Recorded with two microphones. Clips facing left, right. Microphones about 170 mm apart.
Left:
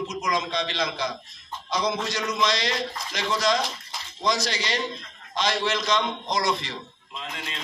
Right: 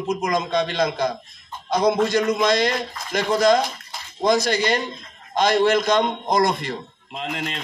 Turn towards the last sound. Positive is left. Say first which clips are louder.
# right 8 dB
turn(degrees=-60)  # may be behind; listen again after turning